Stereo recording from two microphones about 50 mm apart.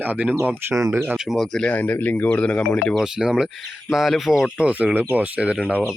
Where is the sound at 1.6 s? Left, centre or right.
Left.